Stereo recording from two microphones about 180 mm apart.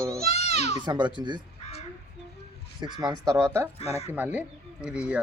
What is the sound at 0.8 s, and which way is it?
Speech, 25° right (ahead or behind).